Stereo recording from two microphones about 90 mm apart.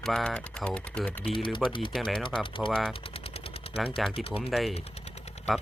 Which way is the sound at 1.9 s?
Centre (ahead or behind).